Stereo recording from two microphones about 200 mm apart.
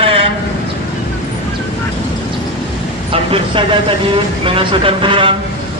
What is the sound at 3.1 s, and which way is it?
A man's voice, 25° right (ahead or behind).